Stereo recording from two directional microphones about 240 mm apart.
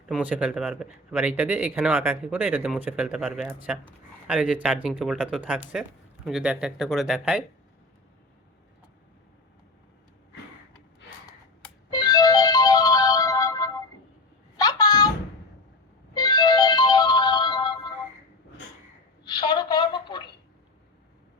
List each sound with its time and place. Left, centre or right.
0.1 s speech: centre
11.9 s music: centre
14.5 s a sound: centre
16.1 s music: centre
19.2 s telephone: centre